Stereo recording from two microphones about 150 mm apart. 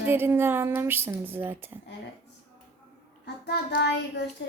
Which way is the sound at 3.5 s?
90° left.